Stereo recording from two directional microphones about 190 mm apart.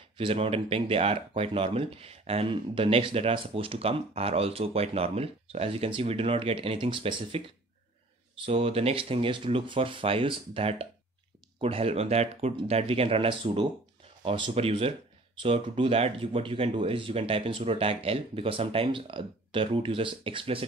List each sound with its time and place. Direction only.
0.2 s speech: 30° right (ahead or behind)
8.5 s speech: 30° right (ahead or behind)